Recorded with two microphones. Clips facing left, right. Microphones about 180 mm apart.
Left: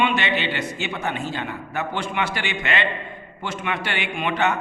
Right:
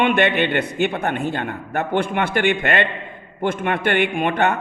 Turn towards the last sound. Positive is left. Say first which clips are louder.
# right 4 dB
turn(degrees=-55)  # may be behind; listen again after turning